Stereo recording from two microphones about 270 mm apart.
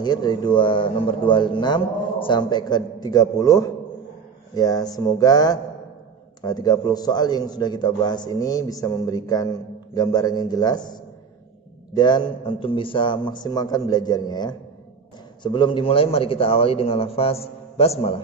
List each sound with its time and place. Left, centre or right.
0.0 s a man's voice: centre